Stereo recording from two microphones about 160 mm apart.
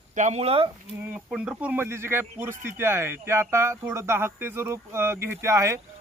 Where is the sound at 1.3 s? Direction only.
10° right (ahead or behind).